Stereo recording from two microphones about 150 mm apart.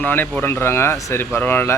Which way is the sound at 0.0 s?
10° left (ahead or behind).